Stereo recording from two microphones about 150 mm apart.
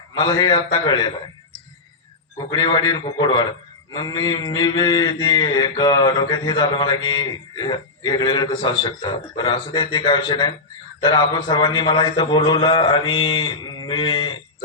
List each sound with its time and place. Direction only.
0.1 s mantra: 30° left (ahead or behind)
2.5 s mantra: 25° left (ahead or behind)
11.0 s a man's voice: 30° left (ahead or behind)